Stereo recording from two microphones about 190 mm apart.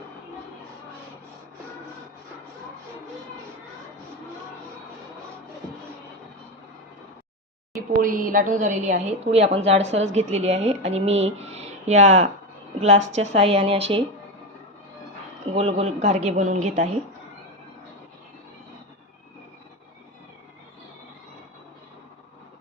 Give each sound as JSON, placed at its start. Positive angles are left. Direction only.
{"t": 7.8, "sound": "a woman's voice", "side_deg": -45}
{"t": 15.5, "sound": "a woman's voice", "side_deg": -35}